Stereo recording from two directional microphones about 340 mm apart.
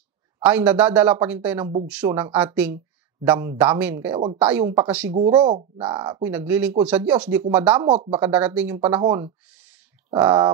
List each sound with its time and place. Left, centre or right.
0.4 s speech: centre
5.1 s speech: centre
7.9 s speech: centre
8.3 s speech: centre